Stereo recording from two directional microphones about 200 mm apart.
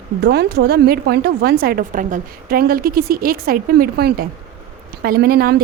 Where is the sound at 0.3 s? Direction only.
55° right (ahead or behind).